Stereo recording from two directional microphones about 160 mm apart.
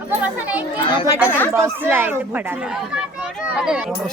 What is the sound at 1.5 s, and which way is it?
Speech, 15° right (ahead or behind).